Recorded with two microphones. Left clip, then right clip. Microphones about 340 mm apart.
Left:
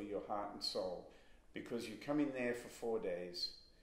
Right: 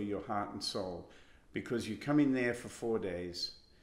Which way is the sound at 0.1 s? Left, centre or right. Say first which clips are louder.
Right 3 dB; right.